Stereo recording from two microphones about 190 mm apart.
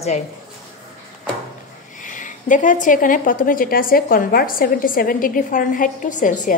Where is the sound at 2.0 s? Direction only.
40° left (ahead or behind).